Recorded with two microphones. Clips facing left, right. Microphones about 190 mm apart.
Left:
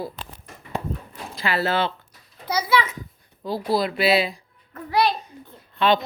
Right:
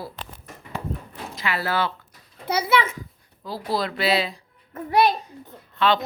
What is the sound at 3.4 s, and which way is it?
Speech, 15° left (ahead or behind).